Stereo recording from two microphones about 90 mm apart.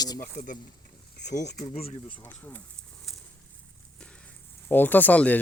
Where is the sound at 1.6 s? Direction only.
85° left.